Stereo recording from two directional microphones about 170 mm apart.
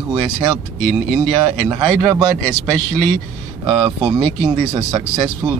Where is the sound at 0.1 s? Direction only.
30° right (ahead or behind).